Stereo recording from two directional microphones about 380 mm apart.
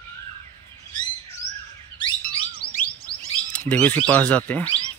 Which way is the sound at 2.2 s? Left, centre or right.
Left.